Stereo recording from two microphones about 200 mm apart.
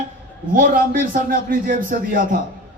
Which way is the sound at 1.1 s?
45° right (ahead or behind).